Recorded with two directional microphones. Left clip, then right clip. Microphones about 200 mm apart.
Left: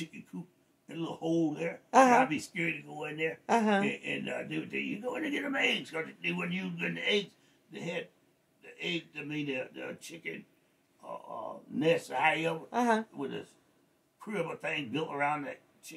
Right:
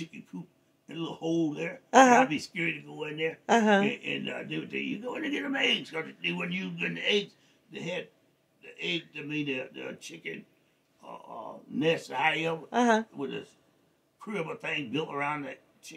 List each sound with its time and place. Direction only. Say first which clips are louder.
0.8 s a man's voice: right 1 dB; 5° right (ahead or behind)
1.9 s speech: right 4 dB; 30° right (ahead or behind)
2.1 s a man's voice: right 3 dB; 5° right (ahead or behind)
3.4 s speech: right 5 dB; 30° right (ahead or behind)
4.0 s a man's voice: right 1 dB; 5° right (ahead or behind)
12.6 s speech: right 5 dB; 30° right (ahead or behind)
13.1 s speech: right 2 dB; 5° right (ahead or behind)